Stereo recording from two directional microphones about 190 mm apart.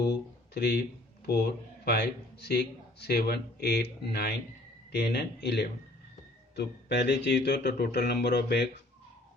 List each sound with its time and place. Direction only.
0.0 s a man's voice: 60° left (ahead or behind)